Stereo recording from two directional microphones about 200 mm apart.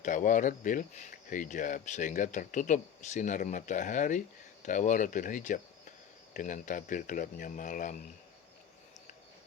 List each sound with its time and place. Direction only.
0.0 s speech: 40° left (ahead or behind)